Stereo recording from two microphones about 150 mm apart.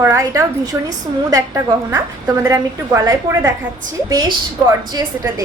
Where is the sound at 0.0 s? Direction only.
20° right (ahead or behind).